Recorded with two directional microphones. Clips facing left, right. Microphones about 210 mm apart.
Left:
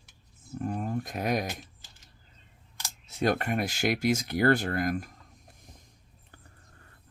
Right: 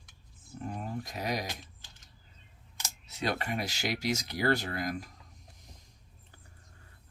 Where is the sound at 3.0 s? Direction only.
50° left (ahead or behind).